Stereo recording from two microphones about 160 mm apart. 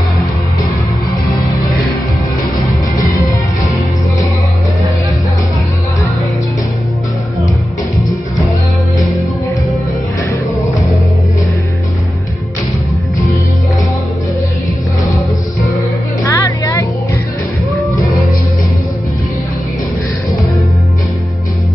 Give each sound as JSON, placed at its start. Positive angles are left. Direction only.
{"t": 16.3, "sound": "music", "side_deg": 20}